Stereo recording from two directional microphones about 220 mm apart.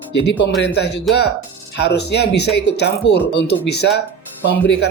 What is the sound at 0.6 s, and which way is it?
Speech, 50° left (ahead or behind).